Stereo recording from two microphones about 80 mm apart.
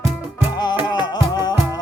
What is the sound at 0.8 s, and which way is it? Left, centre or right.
Music, left.